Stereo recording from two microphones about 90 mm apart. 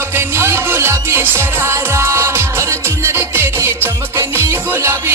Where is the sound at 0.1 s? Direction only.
30° right (ahead or behind).